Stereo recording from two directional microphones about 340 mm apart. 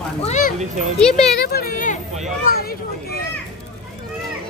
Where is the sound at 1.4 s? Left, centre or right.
Left.